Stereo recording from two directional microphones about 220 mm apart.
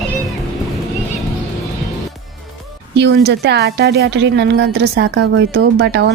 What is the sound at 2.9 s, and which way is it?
Speech, 50° right (ahead or behind).